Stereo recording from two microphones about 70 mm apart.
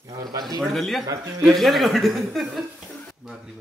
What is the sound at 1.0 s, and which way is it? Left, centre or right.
Speech, right.